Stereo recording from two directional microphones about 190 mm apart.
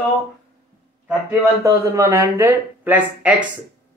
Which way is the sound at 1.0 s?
15° right (ahead or behind).